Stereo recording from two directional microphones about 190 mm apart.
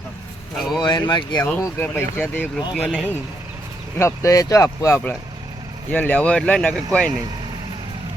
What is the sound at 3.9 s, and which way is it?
Speech, 15° left (ahead or behind).